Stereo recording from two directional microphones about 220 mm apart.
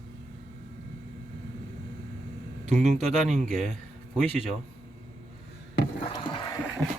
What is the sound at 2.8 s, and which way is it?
Speech, 35° right (ahead or behind).